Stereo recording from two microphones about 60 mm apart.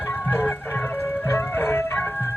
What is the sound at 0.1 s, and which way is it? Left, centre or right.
Music, left.